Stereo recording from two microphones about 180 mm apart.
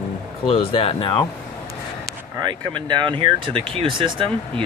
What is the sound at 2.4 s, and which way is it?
Speech, 25° right (ahead or behind).